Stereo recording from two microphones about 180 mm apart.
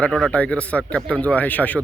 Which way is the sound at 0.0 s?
5° left (ahead or behind).